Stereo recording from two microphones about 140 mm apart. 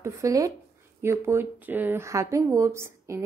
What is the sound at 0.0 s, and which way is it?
Speech, 20° right (ahead or behind).